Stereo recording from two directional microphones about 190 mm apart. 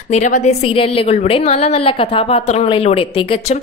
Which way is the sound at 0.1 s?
35° left (ahead or behind).